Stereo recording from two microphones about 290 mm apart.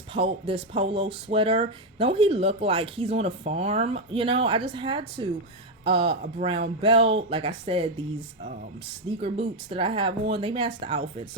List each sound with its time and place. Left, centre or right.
0.1 s speech: centre
9.2 s speech: centre